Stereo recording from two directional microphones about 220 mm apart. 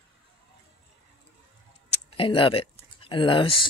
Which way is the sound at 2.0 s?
25° left (ahead or behind).